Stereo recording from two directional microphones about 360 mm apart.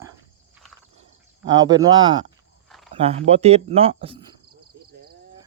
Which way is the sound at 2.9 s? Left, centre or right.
Centre.